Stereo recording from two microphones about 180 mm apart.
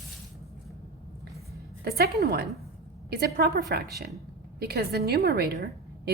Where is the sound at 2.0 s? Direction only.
60° right (ahead or behind).